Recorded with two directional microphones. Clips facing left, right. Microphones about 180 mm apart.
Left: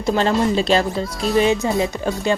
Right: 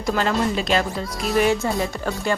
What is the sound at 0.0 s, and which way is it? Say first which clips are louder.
A woman's voice: left 4 dB; 25° left (ahead or behind).